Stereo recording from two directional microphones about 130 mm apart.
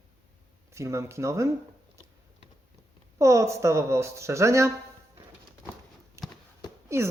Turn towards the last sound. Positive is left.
turn(degrees=-20)  # may be behind; listen again after turning